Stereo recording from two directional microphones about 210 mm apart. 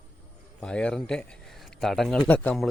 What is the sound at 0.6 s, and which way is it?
Speech, 5° left (ahead or behind).